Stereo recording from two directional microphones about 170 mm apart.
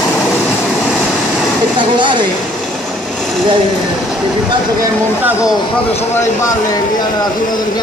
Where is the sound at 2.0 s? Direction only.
30° right (ahead or behind).